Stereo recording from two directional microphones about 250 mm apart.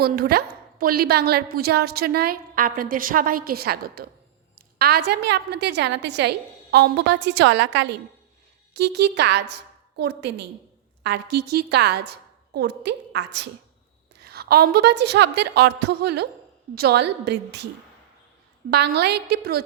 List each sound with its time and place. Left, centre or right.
0.0 s a woman's voice: right
18.7 s a woman's voice: right